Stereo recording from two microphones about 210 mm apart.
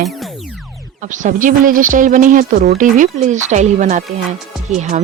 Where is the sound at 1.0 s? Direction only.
35° right (ahead or behind).